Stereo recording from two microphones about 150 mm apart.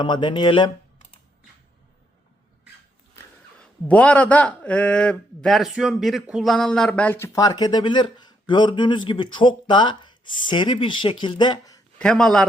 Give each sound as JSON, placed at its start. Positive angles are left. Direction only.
{"t": 0.0, "sound": "a man's voice", "side_deg": 30}
{"t": 3.6, "sound": "a man's voice", "side_deg": 10}
{"t": 7.3, "sound": "a man's voice", "side_deg": 25}
{"t": 11.9, "sound": "a man's voice", "side_deg": 5}